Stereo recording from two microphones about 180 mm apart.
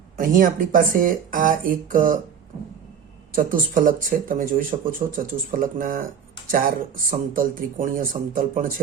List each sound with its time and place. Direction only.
0.2 s speech: 50° right (ahead or behind)
3.3 s speech: 50° right (ahead or behind)